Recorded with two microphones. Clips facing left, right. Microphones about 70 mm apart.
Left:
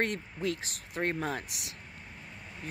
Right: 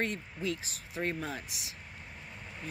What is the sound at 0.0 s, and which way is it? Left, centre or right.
Speech, left.